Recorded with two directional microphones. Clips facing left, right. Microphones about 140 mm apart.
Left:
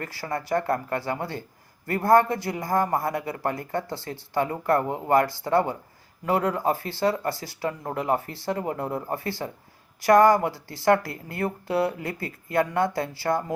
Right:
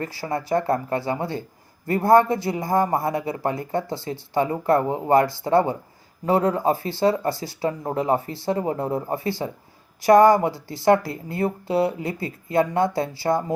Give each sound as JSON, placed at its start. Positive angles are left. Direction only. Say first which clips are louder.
{"t": 0.0, "sound": "a man's voice", "louder": "right 4 dB", "side_deg": -20}